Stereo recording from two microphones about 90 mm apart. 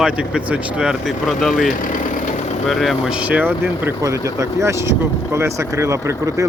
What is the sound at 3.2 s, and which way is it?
Speech, 15° right (ahead or behind).